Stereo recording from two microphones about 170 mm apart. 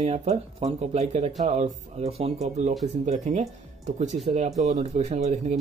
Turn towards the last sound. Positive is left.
turn(degrees=-40)  # may be behind; listen again after turning